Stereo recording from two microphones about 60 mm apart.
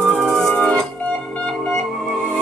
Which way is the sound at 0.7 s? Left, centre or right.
Centre.